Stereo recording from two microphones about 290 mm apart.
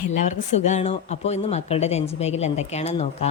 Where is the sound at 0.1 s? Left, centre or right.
Left.